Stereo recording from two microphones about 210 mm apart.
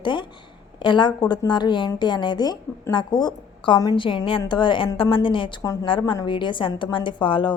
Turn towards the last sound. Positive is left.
turn(degrees=25)  # may be behind; listen again after turning